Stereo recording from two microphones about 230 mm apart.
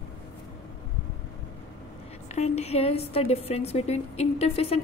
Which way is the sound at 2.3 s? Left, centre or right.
Left.